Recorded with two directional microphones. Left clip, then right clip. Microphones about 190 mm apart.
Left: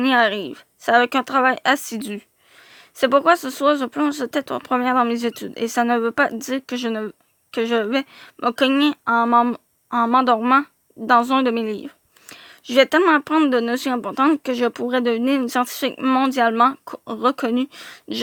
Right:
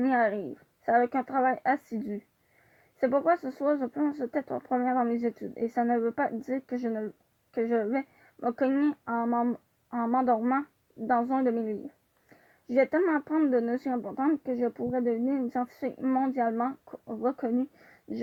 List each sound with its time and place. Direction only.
0.0 s speech: 55° left (ahead or behind)